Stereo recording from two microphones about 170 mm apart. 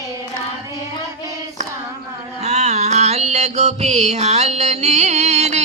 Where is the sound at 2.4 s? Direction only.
40° right (ahead or behind).